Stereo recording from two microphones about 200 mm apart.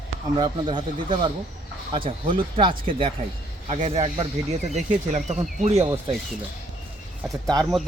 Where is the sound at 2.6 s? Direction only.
25° right (ahead or behind).